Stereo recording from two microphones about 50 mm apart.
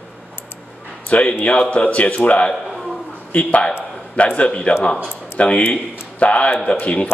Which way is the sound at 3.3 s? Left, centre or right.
Left.